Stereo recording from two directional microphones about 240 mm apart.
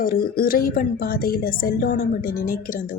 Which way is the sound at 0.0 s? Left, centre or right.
Left.